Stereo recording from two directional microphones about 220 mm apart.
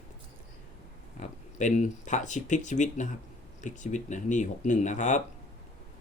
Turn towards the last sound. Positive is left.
turn(degrees=35)  # may be behind; listen again after turning